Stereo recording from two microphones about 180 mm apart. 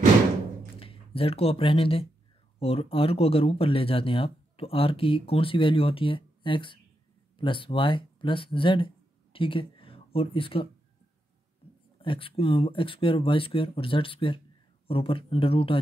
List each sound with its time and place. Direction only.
0.7 s speech: 30° left (ahead or behind)
12.0 s speech: 30° left (ahead or behind)